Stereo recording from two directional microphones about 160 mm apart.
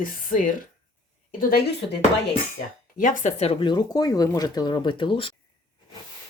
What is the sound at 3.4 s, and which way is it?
Speech, 35° left (ahead or behind).